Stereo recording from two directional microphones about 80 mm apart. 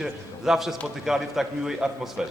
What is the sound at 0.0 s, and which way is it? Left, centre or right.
A man's voice, centre.